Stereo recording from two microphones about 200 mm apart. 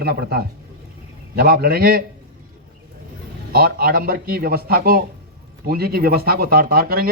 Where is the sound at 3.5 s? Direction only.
50° right (ahead or behind).